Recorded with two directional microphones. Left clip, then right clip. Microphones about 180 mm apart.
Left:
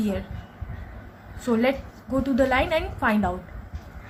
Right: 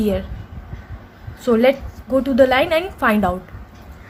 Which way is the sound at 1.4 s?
35° right (ahead or behind).